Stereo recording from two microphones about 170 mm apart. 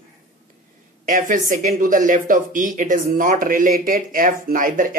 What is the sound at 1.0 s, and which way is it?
Speech, 50° right (ahead or behind).